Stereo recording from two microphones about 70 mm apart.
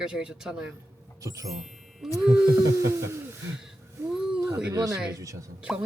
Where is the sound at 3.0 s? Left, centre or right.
Right.